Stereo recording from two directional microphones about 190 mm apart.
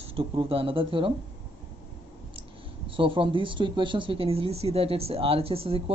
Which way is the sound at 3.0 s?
25° right (ahead or behind).